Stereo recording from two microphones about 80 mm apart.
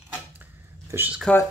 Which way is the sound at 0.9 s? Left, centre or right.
Right.